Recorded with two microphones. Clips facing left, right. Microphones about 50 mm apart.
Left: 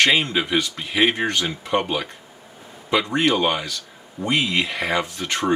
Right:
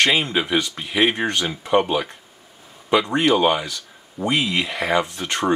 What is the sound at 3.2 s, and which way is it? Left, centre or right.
Speech, centre.